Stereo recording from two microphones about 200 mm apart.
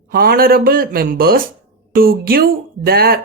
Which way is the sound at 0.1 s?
50° right (ahead or behind).